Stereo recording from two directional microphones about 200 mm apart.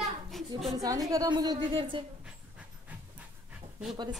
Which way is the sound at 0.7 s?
15° right (ahead or behind).